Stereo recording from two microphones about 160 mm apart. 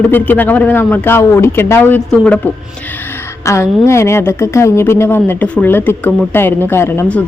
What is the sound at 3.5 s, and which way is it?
Speech, 15° left (ahead or behind).